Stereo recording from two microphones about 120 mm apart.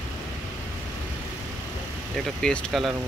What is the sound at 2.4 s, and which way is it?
Speech, 5° left (ahead or behind).